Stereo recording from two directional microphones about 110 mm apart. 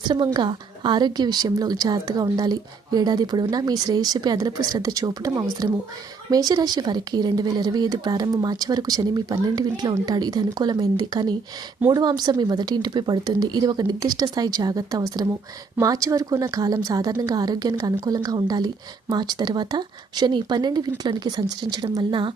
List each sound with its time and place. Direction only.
0.0 s a woman's voice: 40° right (ahead or behind)